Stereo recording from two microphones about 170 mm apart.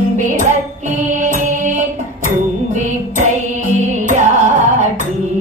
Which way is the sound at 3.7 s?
45° right (ahead or behind).